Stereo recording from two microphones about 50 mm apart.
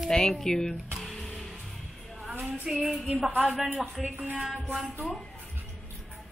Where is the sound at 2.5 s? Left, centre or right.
Centre.